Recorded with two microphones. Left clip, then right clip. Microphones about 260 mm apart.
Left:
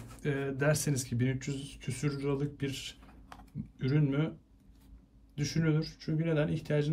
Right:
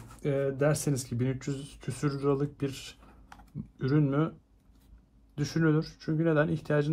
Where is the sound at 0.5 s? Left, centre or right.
Right.